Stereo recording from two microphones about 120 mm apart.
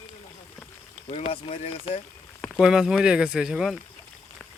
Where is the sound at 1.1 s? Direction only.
55° left (ahead or behind).